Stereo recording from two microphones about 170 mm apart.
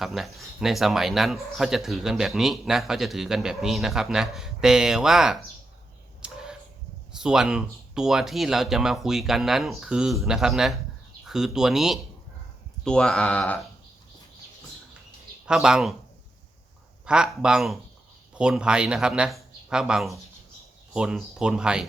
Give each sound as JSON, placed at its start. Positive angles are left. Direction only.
{"t": 0.0, "sound": "speech", "side_deg": 0}
{"t": 6.2, "sound": "a sound", "side_deg": -5}
{"t": 7.2, "sound": "speech", "side_deg": -5}
{"t": 15.4, "sound": "speech", "side_deg": -5}
{"t": 17.1, "sound": "speech", "side_deg": -5}